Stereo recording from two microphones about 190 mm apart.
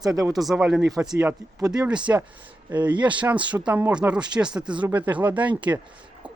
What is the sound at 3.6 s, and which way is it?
Speech, 5° right (ahead or behind).